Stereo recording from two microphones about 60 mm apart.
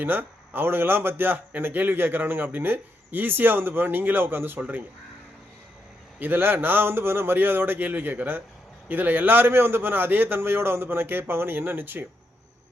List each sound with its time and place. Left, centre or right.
0.0 s a man's voice: right
6.1 s a man's voice: right